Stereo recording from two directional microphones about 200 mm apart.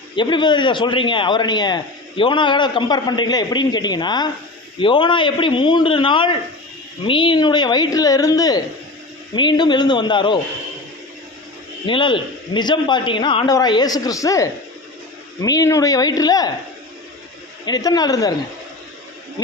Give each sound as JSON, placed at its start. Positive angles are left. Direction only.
{"t": 0.2, "sound": "a man's voice", "side_deg": 20}
{"t": 11.9, "sound": "a man's voice", "side_deg": 25}
{"t": 17.7, "sound": "a man's voice", "side_deg": 20}